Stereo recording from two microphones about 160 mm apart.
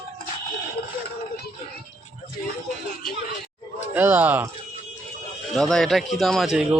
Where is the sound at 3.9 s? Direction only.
10° right (ahead or behind).